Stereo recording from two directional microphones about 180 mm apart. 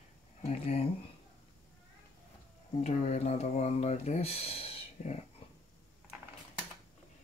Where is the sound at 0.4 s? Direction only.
35° left (ahead or behind).